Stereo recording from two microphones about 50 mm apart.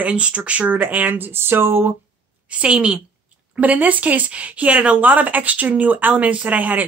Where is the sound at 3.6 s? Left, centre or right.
Right.